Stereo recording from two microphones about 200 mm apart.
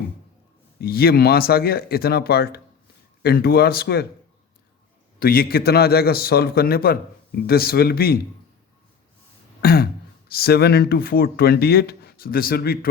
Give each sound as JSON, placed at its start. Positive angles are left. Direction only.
{"t": 0.8, "sound": "speech", "side_deg": 50}
{"t": 5.2, "sound": "speech", "side_deg": 50}
{"t": 9.6, "sound": "speech", "side_deg": 50}